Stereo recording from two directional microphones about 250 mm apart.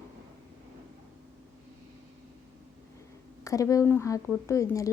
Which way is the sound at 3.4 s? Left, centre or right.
Centre.